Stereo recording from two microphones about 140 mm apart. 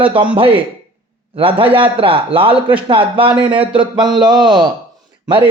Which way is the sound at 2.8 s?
35° right (ahead or behind).